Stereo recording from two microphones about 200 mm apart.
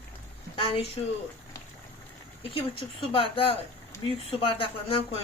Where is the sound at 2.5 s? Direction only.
25° left (ahead or behind).